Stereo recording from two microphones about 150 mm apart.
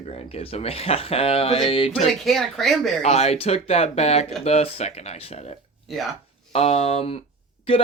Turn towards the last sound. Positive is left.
turn(degrees=35)  # may be behind; listen again after turning